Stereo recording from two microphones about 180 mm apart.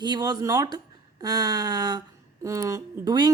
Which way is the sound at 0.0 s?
20° right (ahead or behind).